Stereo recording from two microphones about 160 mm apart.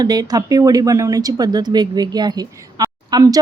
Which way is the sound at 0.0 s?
25° right (ahead or behind).